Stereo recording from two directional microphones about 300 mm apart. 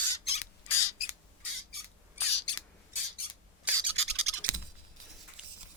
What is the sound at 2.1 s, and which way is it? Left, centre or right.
Bird, left.